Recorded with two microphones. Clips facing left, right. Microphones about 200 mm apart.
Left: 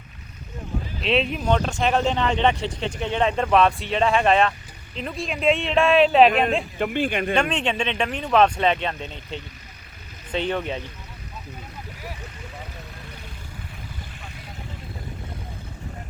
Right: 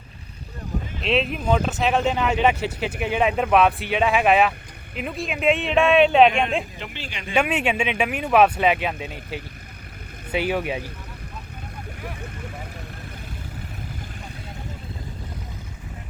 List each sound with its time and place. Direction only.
1.0 s speech: centre (ahead or behind)
6.7 s speech: 50° left (ahead or behind)
7.3 s speech: 10° right (ahead or behind)